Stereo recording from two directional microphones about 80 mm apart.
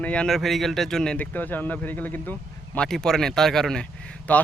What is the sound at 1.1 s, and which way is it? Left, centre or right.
Speech, left.